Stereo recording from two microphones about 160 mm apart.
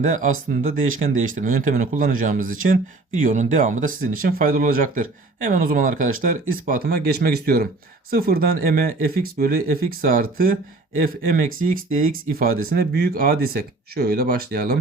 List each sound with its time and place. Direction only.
0.0 s speech: 55° right (ahead or behind)